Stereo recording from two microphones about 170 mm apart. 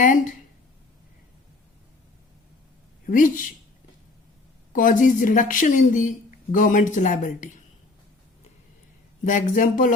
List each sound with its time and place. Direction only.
0.0 s a woman's voice: 50° left (ahead or behind)
3.1 s a woman's voice: 50° left (ahead or behind)
4.7 s a woman's voice: 50° left (ahead or behind)
9.2 s a woman's voice: 50° left (ahead or behind)